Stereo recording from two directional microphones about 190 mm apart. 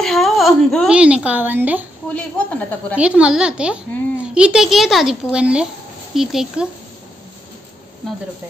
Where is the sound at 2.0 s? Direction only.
5° left (ahead or behind).